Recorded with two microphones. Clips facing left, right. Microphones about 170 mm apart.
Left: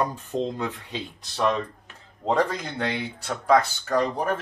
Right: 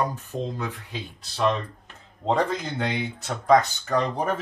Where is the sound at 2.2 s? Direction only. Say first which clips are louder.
Even; centre (ahead or behind).